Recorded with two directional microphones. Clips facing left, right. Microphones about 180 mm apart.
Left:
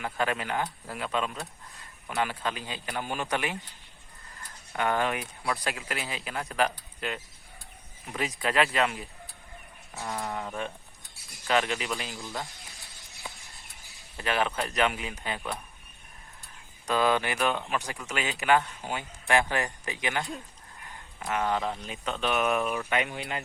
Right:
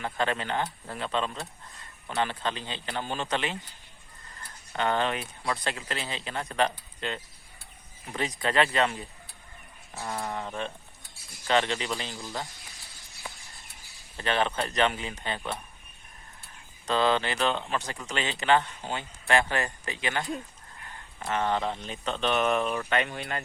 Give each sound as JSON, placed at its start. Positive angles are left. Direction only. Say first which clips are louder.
{"t": 0.0, "sound": "speech", "louder": "right 1 dB", "side_deg": 5}
{"t": 10.1, "sound": "speech", "louder": "even", "side_deg": -5}
{"t": 11.4, "sound": "speech", "louder": "right 1 dB", "side_deg": 5}
{"t": 14.2, "sound": "speech", "louder": "right 1 dB", "side_deg": 5}
{"t": 16.4, "sound": "a sound", "louder": "even", "side_deg": 10}
{"t": 17.7, "sound": "speech", "louder": "even", "side_deg": 10}
{"t": 21.2, "sound": "speech", "louder": "right 1 dB", "side_deg": 5}
{"t": 23.0, "sound": "speech", "louder": "right 1 dB", "side_deg": 15}